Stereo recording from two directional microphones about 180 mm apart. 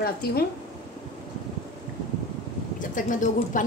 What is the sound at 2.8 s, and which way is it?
Speech, 45° left (ahead or behind).